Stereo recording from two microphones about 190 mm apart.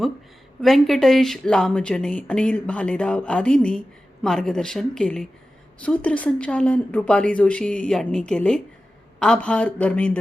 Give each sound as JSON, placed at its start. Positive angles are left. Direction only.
{"t": 0.6, "sound": "a woman's voice", "side_deg": 0}